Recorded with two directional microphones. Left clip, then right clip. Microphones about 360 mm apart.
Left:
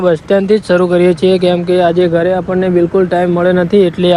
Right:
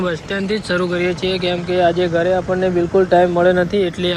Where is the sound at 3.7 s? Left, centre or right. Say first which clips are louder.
Left 8 dB; centre.